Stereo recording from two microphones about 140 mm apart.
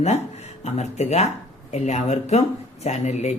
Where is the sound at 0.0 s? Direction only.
55° left (ahead or behind).